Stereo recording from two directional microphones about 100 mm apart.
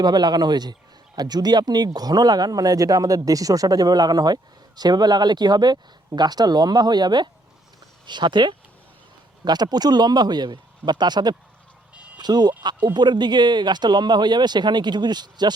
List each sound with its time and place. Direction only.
0.0 s a man's voice: 45° right (ahead or behind)